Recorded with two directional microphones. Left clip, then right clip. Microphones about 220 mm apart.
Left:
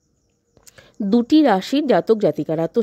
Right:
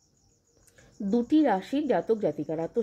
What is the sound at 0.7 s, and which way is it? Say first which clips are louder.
A woman's voice: left 9 dB; 45° left (ahead or behind).